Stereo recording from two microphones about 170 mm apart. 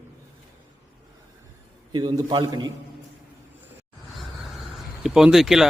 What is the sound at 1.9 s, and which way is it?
Speech, 25° right (ahead or behind).